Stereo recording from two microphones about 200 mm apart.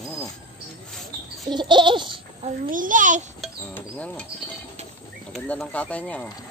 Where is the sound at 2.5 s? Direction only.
40° right (ahead or behind).